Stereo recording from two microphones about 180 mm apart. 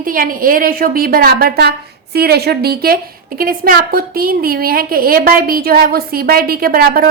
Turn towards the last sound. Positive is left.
turn(degrees=-55)  # may be behind; listen again after turning